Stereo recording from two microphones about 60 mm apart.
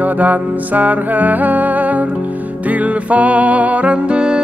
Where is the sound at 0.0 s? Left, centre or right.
Right.